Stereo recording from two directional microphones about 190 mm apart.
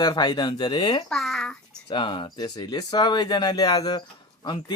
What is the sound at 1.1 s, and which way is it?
Speech, centre (ahead or behind).